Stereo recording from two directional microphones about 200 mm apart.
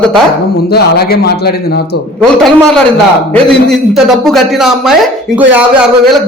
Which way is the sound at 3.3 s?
Centre (ahead or behind).